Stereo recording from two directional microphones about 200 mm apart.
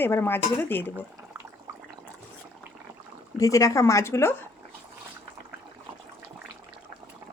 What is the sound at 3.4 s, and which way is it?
Speech, 15° left (ahead or behind).